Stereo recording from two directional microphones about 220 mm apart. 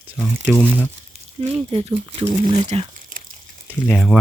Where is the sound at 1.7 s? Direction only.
25° right (ahead or behind).